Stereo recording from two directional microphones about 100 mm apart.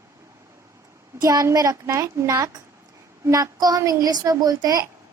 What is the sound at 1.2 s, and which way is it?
A woman's voice, 35° right (ahead or behind).